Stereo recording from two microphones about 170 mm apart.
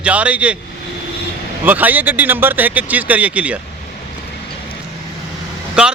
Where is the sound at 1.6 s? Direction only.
10° right (ahead or behind).